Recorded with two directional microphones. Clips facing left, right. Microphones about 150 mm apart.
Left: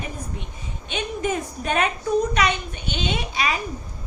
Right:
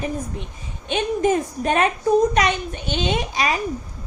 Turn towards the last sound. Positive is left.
turn(degrees=-40)  # may be behind; listen again after turning